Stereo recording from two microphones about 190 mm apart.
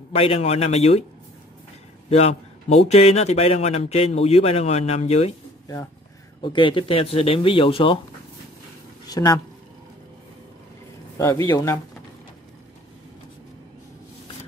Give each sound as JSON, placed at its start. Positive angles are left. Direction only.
{"t": 0.1, "sound": "a man's voice", "side_deg": 30}
{"t": 2.0, "sound": "a sound", "side_deg": 35}
{"t": 2.9, "sound": "a man's voice", "side_deg": 35}
{"t": 6.4, "sound": "speech", "side_deg": 25}
{"t": 9.0, "sound": "speech", "side_deg": 20}
{"t": 11.1, "sound": "speech", "side_deg": 15}